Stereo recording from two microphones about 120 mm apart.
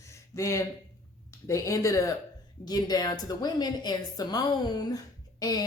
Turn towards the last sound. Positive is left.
turn(degrees=30)  # may be behind; listen again after turning